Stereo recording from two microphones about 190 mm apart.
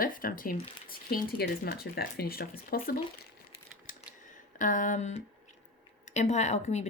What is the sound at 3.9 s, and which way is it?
Typewriter, 45° left (ahead or behind).